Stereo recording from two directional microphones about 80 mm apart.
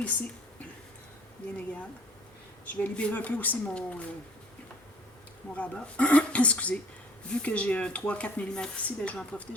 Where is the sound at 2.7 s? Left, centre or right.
Left.